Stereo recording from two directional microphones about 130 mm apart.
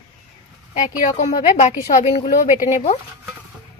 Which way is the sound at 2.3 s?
80° left.